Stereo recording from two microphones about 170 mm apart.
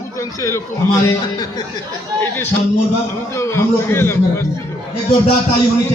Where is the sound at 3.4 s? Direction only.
15° left (ahead or behind).